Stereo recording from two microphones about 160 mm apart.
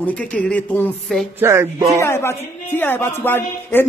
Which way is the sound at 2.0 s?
15° left (ahead or behind).